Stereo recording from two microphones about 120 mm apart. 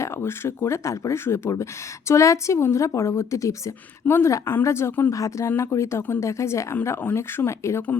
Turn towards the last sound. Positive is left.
turn(degrees=15)  # may be behind; listen again after turning